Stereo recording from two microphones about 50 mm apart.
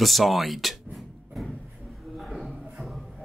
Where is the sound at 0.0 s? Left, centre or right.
Centre.